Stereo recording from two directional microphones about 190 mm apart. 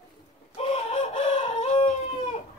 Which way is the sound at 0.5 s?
35° left (ahead or behind).